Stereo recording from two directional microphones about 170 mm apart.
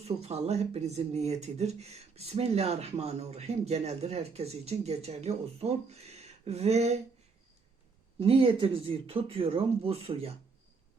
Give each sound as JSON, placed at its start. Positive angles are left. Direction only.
{"t": 0.0, "sound": "speech", "side_deg": -40}
{"t": 8.2, "sound": "speech", "side_deg": -35}